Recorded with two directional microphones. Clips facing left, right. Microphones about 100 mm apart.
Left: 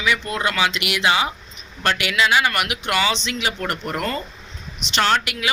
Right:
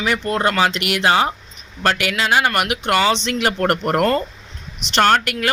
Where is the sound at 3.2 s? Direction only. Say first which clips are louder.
Right 6 dB; 55° right (ahead or behind).